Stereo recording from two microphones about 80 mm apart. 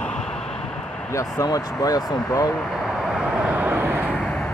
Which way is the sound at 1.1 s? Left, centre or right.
Left.